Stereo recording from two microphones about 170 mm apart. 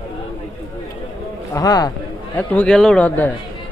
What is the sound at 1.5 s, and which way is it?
Speech, 20° left (ahead or behind).